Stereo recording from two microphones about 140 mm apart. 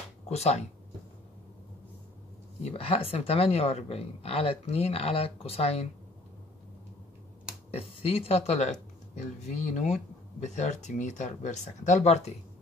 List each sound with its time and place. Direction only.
0.3 s a woman's voice: 50° left (ahead or behind)
2.6 s a woman's voice: 45° left (ahead or behind)
7.7 s speech: 45° left (ahead or behind)